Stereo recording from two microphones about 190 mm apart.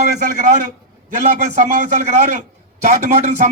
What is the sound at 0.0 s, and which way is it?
Speech, 40° right (ahead or behind).